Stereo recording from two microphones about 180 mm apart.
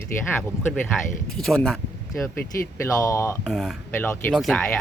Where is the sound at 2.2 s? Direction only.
15° left (ahead or behind).